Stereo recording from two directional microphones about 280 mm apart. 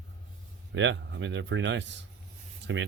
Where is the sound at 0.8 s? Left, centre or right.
Right.